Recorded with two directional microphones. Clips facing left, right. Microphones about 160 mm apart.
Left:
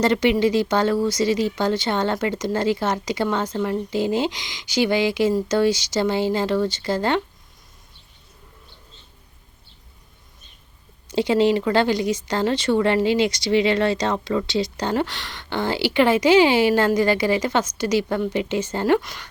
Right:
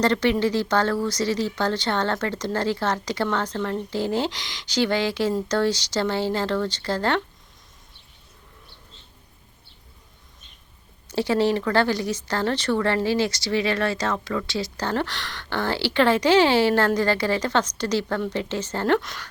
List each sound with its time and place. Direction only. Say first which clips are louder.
0.0 s speech: left 3 dB; 10° left (ahead or behind)
11.1 s speech: left 3 dB; 15° left (ahead or behind)